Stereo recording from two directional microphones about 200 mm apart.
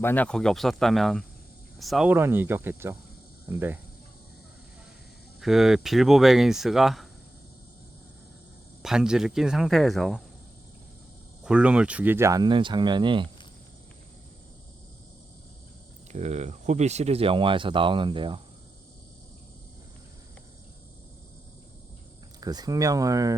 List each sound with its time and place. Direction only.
0.0 s speech: 10° left (ahead or behind); by 3.8 s 10° right (ahead or behind)
5.4 s speech: centre (ahead or behind)
8.8 s speech: 5° right (ahead or behind)
11.4 s speech: 5° right (ahead or behind); by 13.2 s 25° right (ahead or behind)
16.1 s speech: 35° right (ahead or behind)
22.4 s speech: 20° right (ahead or behind)